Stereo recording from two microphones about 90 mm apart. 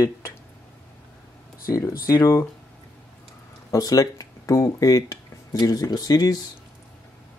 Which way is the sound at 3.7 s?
40° left (ahead or behind).